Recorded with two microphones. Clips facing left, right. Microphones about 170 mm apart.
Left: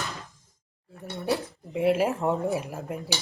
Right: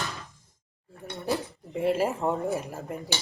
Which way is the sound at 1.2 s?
Centre (ahead or behind).